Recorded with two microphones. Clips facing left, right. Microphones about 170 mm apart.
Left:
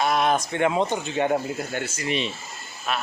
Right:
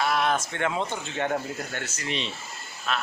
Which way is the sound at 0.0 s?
20° left (ahead or behind).